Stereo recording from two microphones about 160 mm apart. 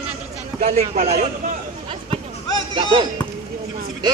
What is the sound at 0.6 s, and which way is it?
Speech, 50° right (ahead or behind).